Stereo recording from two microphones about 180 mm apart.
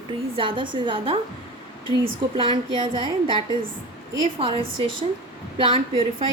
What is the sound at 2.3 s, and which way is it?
A woman's voice, 30° right (ahead or behind).